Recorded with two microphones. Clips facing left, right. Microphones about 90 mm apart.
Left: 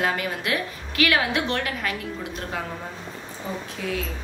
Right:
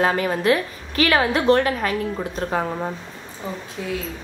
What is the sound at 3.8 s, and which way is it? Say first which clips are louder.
Speech: right 2 dB; 25° right (ahead or behind).